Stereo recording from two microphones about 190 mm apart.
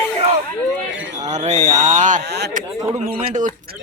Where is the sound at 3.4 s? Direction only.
40° right (ahead or behind).